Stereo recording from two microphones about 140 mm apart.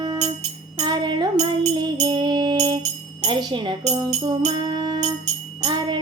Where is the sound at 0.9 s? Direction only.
30° right (ahead or behind).